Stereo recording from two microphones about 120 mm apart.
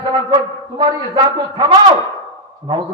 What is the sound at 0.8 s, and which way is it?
Speech, 30° right (ahead or behind).